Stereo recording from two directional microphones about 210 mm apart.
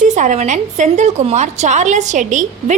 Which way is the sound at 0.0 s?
35° right (ahead or behind).